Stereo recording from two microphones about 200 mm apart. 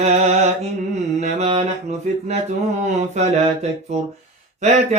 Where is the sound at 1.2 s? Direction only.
35° right (ahead or behind).